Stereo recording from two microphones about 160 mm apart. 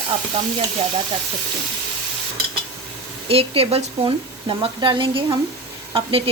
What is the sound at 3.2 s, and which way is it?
A woman's voice, 35° right (ahead or behind).